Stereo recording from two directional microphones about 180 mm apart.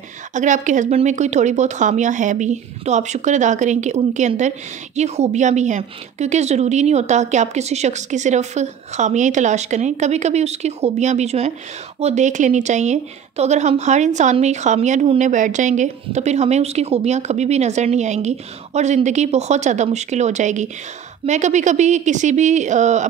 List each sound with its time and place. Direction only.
0.3 s speech: 45° right (ahead or behind)